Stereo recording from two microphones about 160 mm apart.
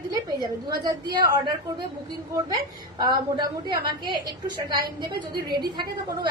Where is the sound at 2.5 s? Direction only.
25° right (ahead or behind).